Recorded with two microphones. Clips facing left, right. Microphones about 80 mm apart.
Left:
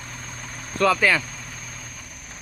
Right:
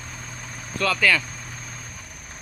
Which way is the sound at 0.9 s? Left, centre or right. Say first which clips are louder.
Left 2 dB; centre.